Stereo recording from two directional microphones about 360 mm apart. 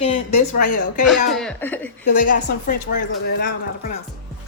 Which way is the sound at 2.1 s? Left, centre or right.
Left.